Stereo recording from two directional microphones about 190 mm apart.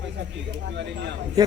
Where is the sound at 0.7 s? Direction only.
65° right (ahead or behind).